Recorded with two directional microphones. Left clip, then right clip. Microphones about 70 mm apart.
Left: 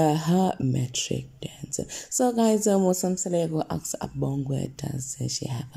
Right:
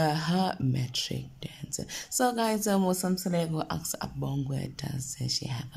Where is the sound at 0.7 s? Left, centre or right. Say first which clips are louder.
Left 4 dB; left.